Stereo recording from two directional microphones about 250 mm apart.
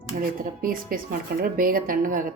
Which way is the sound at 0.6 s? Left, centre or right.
Right.